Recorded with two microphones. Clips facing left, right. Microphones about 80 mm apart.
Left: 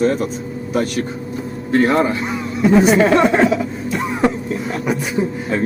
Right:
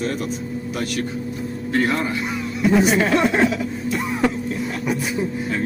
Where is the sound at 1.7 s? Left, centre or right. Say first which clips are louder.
Left 6 dB; left.